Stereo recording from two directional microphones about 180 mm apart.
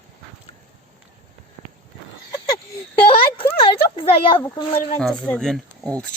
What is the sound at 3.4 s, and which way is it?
A child's voice, 30° left (ahead or behind).